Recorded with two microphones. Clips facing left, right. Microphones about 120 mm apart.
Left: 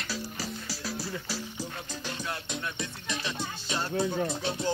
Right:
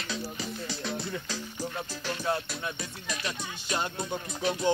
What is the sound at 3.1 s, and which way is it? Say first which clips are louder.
Music: left 1 dB; 25° left (ahead or behind).